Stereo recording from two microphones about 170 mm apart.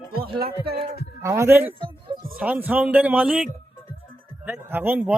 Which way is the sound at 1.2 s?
15° right (ahead or behind).